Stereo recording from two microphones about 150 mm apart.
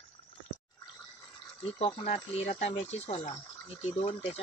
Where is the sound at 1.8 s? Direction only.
45° left (ahead or behind).